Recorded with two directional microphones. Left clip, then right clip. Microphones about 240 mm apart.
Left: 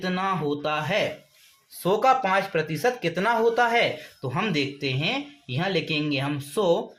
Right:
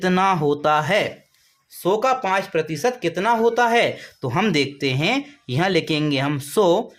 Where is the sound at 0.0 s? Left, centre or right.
Right.